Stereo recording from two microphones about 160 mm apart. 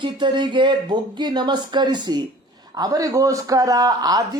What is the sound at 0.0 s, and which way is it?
A man's voice, 30° right (ahead or behind).